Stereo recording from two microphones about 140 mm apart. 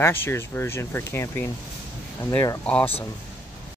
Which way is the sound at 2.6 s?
10° left (ahead or behind).